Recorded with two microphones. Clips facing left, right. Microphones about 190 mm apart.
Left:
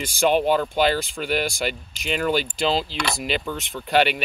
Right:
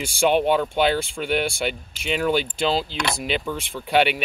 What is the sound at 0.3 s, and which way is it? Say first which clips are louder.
Speech: even; centre (ahead or behind).